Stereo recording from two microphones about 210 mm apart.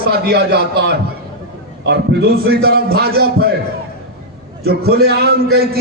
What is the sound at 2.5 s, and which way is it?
A man's voice, 50° right (ahead or behind).